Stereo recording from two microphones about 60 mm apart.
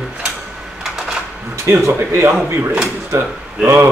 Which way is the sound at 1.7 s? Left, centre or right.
Right.